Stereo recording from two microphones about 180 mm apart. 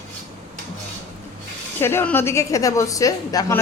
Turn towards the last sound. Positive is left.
turn(degrees=20)  # may be behind; listen again after turning